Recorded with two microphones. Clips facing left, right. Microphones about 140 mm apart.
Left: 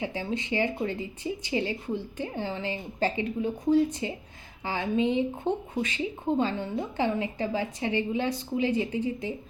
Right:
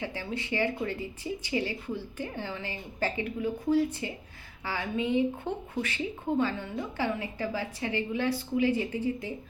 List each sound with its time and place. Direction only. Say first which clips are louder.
0.0 s a woman's voice: left 4 dB; 20° left (ahead or behind)